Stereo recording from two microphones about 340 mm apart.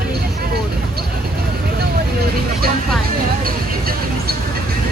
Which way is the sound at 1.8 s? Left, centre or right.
Right.